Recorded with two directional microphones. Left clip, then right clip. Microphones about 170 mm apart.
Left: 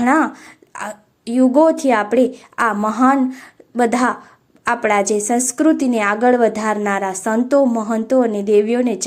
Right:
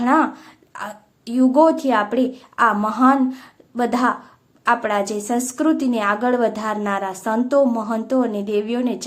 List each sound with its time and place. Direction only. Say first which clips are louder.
0.0 s a woman's voice: left 2 dB; 25° left (ahead or behind)